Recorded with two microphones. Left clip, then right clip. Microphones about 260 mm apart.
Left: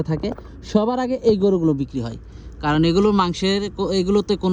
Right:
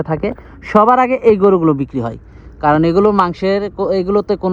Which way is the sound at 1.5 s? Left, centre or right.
Centre.